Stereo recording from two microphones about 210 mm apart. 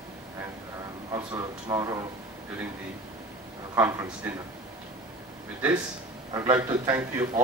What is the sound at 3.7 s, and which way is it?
Speech, 10° right (ahead or behind).